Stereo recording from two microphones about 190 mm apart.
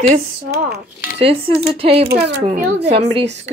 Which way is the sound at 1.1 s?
30° right (ahead or behind).